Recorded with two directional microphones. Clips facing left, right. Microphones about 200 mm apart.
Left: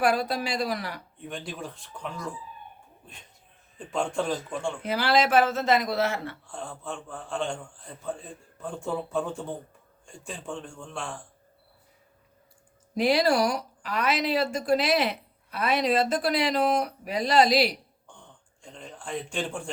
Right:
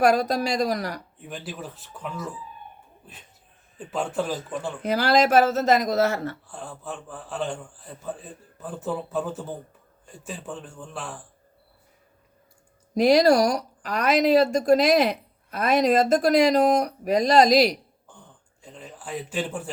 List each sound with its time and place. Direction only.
0.0 s speech: 40° right (ahead or behind)
1.2 s a man's voice: 5° right (ahead or behind)
3.8 s a man's voice: 5° right (ahead or behind)
4.8 s speech: 40° right (ahead or behind)
6.5 s a man's voice: 5° right (ahead or behind)
12.9 s speech: 40° right (ahead or behind)
18.6 s a man's voice: 5° right (ahead or behind)